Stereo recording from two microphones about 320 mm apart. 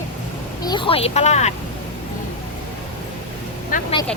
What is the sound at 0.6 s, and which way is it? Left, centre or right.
Speech, centre.